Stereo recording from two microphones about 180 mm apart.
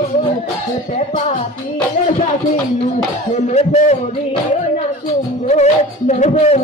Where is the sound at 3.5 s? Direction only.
35° left (ahead or behind).